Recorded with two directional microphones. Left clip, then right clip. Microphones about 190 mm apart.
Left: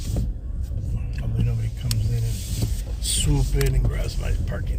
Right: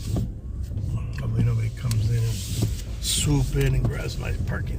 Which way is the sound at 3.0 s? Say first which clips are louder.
Right 1 dB; 15° right (ahead or behind).